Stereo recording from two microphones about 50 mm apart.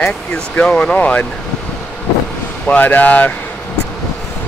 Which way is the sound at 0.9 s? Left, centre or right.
Left.